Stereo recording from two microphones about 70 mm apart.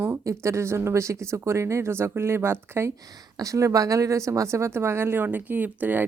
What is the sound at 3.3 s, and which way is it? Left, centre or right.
A woman's voice, right.